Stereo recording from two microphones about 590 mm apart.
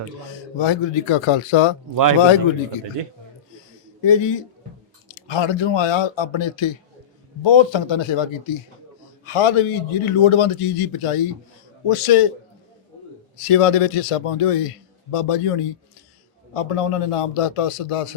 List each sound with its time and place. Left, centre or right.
0.5 s speech: left
4.0 s a man's voice: left
13.3 s a man's voice: left